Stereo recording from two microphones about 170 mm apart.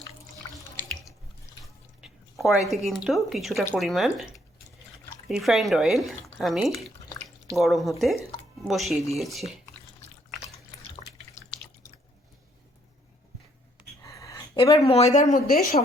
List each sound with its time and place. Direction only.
1.6 s drip: centre (ahead or behind)
3.8 s speech: centre (ahead or behind)
5.3 s speech: centre (ahead or behind)
14.0 s speech: 20° left (ahead or behind); by 15.5 s 45° left (ahead or behind)